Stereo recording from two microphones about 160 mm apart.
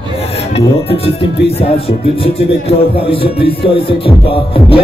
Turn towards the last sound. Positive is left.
turn(degrees=35)  # may be behind; listen again after turning